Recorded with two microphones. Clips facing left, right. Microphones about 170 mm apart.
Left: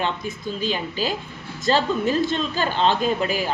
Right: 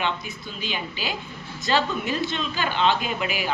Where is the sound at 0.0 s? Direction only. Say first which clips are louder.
Left 3 dB; 40° left (ahead or behind).